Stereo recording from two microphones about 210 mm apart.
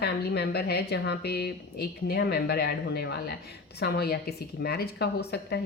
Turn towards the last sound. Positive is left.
turn(degrees=50)  # may be behind; listen again after turning